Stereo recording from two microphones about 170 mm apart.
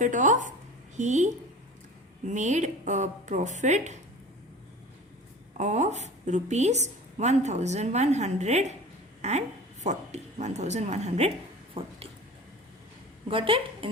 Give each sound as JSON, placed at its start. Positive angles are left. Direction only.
{"t": 0.0, "sound": "a woman's voice", "side_deg": -50}
{"t": 5.5, "sound": "a woman's voice", "side_deg": -45}
{"t": 13.2, "sound": "a woman's voice", "side_deg": -30}